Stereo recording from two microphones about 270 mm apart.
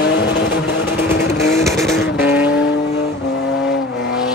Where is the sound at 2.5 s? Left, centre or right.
Left.